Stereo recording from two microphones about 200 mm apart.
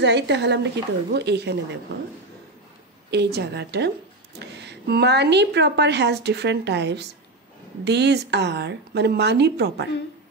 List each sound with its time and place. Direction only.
0.0 s a woman's voice: 60° right (ahead or behind)
3.1 s a woman's voice: 55° right (ahead or behind)